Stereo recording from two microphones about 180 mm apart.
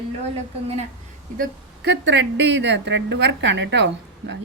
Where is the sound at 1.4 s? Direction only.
70° right (ahead or behind).